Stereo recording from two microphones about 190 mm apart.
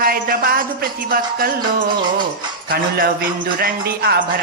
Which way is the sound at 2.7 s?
50° right (ahead or behind).